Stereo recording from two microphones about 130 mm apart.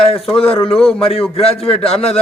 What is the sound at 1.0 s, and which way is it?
A man's voice, 45° left (ahead or behind).